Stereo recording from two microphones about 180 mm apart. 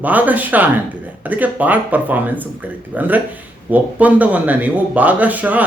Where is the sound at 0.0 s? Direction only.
10° right (ahead or behind).